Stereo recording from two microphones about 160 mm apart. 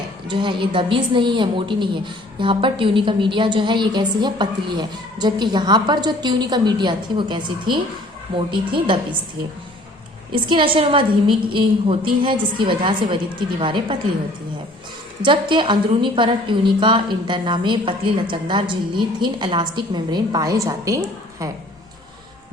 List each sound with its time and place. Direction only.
0.3 s a woman's voice: 30° right (ahead or behind)
10.3 s a woman's voice: 30° right (ahead or behind)
15.2 s a woman's voice: 30° right (ahead or behind)